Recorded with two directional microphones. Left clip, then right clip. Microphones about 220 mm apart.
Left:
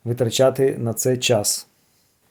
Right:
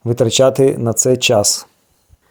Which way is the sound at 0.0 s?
35° right (ahead or behind).